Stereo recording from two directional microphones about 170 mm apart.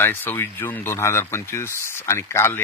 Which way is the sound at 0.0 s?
10° left (ahead or behind).